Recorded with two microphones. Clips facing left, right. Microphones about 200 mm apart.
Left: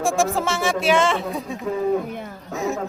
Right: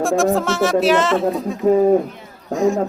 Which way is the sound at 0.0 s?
Centre (ahead or behind).